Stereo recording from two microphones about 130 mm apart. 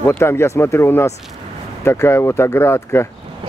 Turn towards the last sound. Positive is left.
turn(degrees=20)  # may be behind; listen again after turning